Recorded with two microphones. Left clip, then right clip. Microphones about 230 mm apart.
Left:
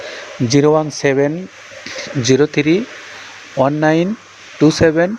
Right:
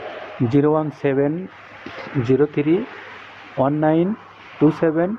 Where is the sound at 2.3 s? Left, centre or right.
Left.